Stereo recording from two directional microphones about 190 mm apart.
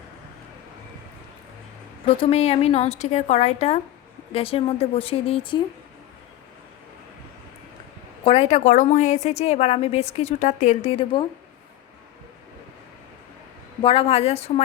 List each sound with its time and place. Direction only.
2.1 s a woman's voice: 30° left (ahead or behind)
8.2 s a woman's voice: 30° left (ahead or behind)
13.8 s a woman's voice: 30° left (ahead or behind)